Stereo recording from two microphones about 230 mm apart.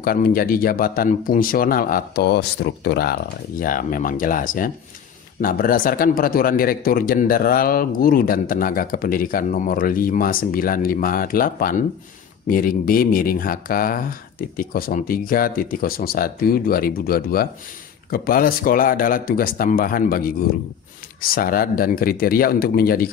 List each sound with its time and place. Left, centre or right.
0.0 s speech: left
21.4 s speech: left